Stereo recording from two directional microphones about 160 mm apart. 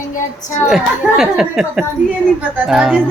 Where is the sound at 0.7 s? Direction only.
5° right (ahead or behind).